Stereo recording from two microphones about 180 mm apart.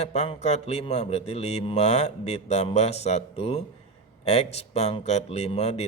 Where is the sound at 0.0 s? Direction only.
35° left (ahead or behind).